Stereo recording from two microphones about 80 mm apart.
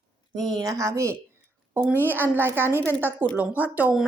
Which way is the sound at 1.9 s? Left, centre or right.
Right.